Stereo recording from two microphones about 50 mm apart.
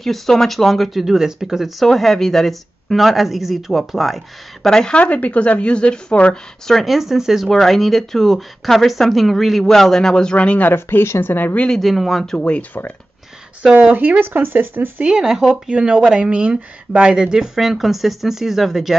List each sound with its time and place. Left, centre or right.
0.0 s speech: centre
1.9 s speech: centre
4.6 s speech: centre
4.9 s speech: left
6.8 s speech: centre
7.4 s speech: centre
10.3 s speech: left
10.6 s speech: left
11.8 s speech: centre
12.4 s speech: left
13.7 s speech: right
15.0 s speech: centre
15.7 s speech: centre
17.1 s speech: centre